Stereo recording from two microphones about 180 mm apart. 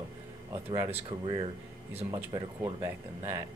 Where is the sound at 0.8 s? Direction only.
30° right (ahead or behind).